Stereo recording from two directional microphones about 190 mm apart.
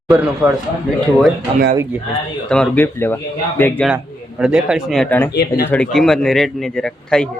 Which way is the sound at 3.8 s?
5° right (ahead or behind).